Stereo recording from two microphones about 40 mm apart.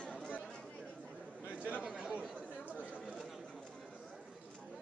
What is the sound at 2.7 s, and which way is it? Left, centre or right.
Chatter, left.